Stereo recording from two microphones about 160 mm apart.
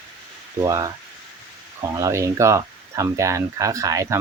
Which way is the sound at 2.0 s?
20° right (ahead or behind).